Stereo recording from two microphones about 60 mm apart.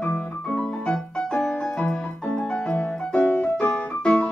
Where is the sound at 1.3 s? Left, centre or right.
Centre.